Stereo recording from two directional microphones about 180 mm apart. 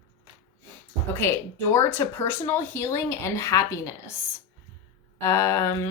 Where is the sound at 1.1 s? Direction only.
15° left (ahead or behind).